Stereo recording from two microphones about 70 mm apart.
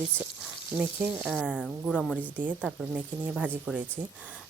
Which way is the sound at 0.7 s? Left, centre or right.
Right.